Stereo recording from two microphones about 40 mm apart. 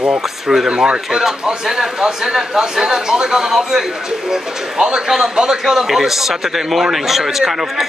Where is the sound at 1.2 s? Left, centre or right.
Centre.